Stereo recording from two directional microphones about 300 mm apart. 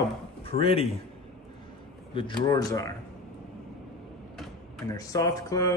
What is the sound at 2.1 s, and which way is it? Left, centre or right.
Speech, centre.